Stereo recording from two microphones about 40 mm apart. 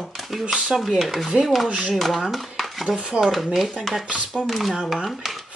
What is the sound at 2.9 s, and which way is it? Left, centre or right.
Speech, right.